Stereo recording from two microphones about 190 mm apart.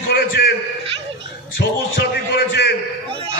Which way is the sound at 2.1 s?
60° left (ahead or behind).